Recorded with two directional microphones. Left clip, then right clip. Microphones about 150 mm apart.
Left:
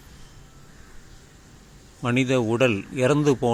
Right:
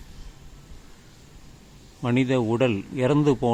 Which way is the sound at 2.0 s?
10° left (ahead or behind).